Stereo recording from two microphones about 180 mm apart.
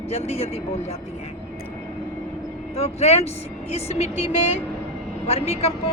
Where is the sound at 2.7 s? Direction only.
35° left (ahead or behind).